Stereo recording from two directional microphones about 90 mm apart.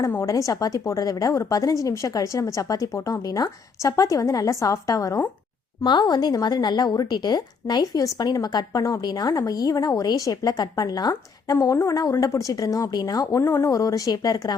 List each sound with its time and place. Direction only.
0.2 s speech: 35° left (ahead or behind)
5.8 s a woman's voice: 55° left (ahead or behind)